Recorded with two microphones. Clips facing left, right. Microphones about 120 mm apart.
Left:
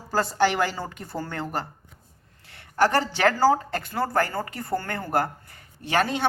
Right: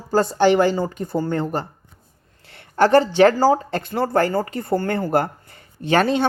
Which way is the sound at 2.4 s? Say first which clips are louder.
Right 4 dB; 25° right (ahead or behind).